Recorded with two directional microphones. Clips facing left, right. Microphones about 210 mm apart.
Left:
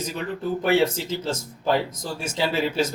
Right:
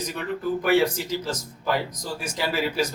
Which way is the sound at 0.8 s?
25° left (ahead or behind).